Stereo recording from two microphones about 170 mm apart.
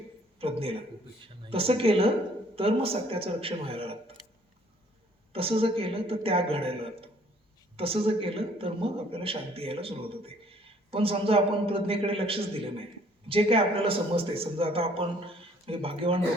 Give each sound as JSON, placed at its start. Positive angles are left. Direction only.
{"t": 0.3, "sound": "a sound", "side_deg": -35}
{"t": 1.5, "sound": "a man's voice", "side_deg": -35}
{"t": 5.3, "sound": "a man's voice", "side_deg": -35}